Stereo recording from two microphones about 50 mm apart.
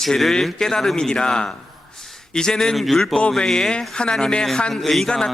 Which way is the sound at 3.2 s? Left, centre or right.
Centre.